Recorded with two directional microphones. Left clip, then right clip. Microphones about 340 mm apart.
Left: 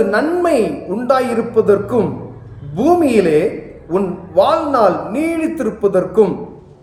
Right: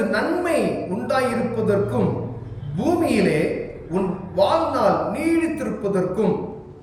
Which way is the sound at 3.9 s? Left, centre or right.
Centre.